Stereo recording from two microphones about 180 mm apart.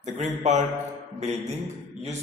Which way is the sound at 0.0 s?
40° right (ahead or behind).